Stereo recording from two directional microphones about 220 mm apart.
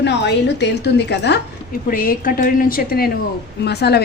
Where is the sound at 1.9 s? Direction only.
40° left (ahead or behind).